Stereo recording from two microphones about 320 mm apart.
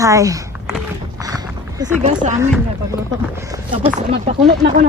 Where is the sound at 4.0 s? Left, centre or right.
Right.